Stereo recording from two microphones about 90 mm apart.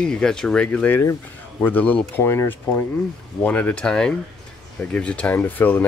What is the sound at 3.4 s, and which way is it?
Speech, 15° left (ahead or behind).